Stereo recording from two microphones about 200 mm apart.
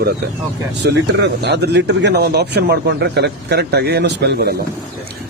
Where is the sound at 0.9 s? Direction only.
60° right (ahead or behind).